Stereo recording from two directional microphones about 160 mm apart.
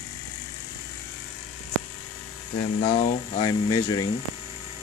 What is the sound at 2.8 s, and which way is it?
Speech, 30° left (ahead or behind).